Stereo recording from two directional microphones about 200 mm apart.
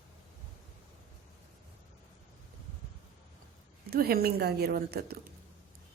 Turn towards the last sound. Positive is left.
turn(degrees=-50)  # may be behind; listen again after turning